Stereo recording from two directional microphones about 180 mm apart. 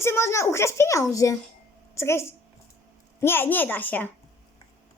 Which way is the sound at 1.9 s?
15° left (ahead or behind).